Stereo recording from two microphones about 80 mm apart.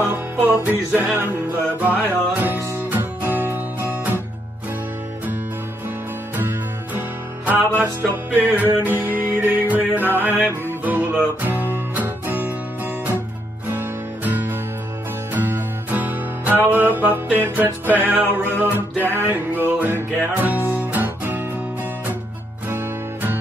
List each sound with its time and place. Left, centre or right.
0.1 s music: right
6.3 s music: right
22.7 s music: right